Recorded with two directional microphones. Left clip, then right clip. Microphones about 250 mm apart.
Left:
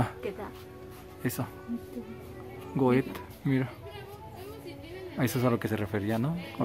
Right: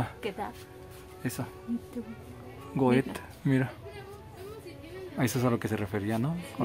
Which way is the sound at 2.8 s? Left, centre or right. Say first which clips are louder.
Even; centre.